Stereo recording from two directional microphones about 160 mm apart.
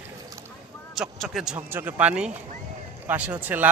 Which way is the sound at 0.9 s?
Centre (ahead or behind).